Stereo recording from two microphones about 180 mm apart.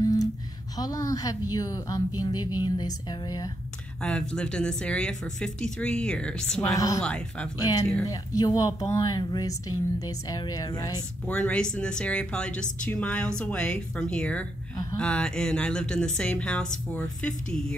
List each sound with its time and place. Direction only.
0.0 s a sound: 20° left (ahead or behind)
0.7 s speech: 20° left (ahead or behind)
4.0 s speech: 5° left (ahead or behind)
7.5 s speech: 20° left (ahead or behind)
11.2 s speech: 5° left (ahead or behind)